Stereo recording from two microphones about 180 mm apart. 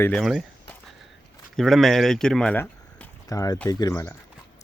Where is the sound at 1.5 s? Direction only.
Centre (ahead or behind).